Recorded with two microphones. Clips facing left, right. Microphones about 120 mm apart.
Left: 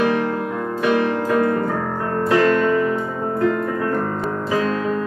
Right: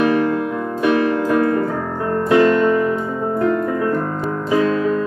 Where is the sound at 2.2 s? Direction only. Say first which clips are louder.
Right 3 dB; 20° right (ahead or behind).